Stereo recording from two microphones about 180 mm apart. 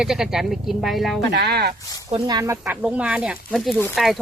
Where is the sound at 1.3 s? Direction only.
65° right (ahead or behind).